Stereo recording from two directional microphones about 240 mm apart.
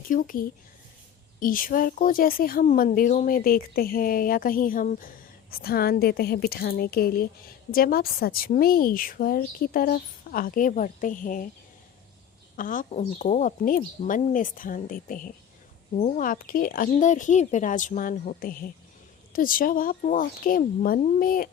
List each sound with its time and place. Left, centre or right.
0.1 s speech: left
12.5 s speech: left